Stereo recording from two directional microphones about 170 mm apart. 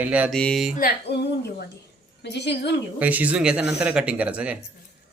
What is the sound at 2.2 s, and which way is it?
Speech, 90° left.